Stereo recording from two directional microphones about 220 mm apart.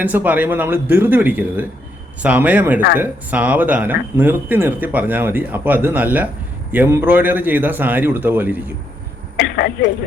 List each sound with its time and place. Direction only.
0.0 s speech: 5° right (ahead or behind)
9.4 s speech: 50° left (ahead or behind)